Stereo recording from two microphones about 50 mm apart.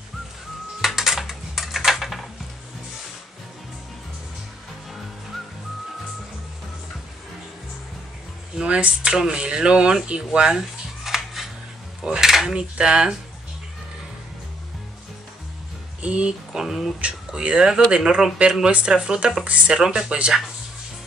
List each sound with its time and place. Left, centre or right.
0.7 s a sound: centre
8.5 s speech: right
11.1 s a sound: centre
12.0 s dishes: centre
12.5 s speech: centre
16.0 s speech: right
16.5 s speech: centre
17.3 s speech: centre
19.7 s speech: centre